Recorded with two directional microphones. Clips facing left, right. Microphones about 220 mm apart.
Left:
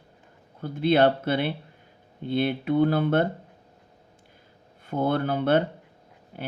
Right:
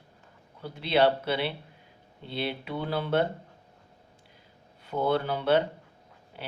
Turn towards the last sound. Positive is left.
turn(degrees=50)  # may be behind; listen again after turning